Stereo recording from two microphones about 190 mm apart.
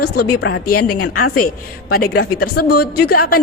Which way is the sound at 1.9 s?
50° left (ahead or behind).